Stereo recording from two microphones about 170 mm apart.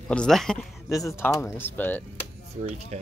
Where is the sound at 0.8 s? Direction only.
20° left (ahead or behind).